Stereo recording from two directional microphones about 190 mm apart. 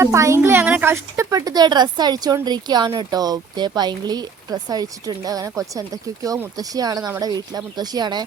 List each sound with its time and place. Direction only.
0.0 s speech: 15° right (ahead or behind)